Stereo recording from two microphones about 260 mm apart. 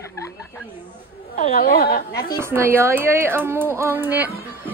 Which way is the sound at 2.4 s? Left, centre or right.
Centre.